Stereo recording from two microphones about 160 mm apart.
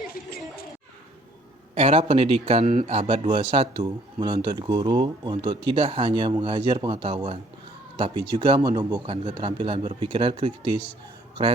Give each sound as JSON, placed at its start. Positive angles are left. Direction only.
{"t": 1.7, "sound": "a man's voice", "side_deg": -40}